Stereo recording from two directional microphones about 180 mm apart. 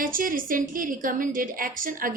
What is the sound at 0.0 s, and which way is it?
A woman's voice, 50° right (ahead or behind).